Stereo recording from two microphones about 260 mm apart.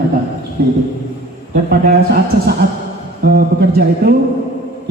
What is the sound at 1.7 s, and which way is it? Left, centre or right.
Speech, right.